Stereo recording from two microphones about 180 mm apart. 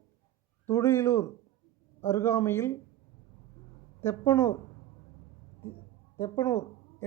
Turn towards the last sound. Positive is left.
turn(degrees=15)  # may be behind; listen again after turning